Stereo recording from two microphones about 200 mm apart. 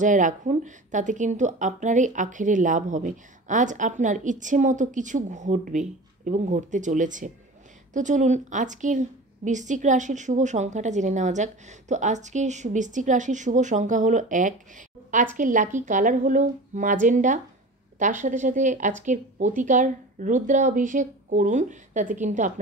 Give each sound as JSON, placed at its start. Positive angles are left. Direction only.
{"t": 0.0, "sound": "a woman's voice", "side_deg": -40}